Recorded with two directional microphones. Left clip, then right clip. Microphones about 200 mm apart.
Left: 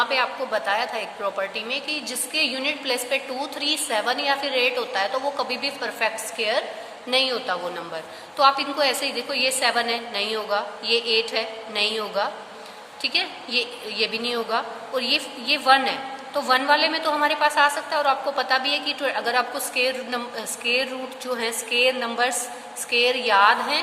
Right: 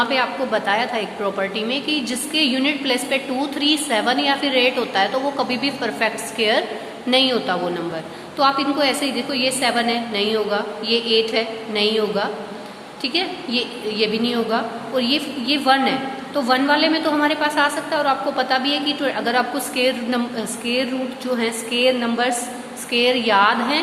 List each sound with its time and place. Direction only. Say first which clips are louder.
0.0 s a woman's voice: right 3 dB; 20° left (ahead or behind)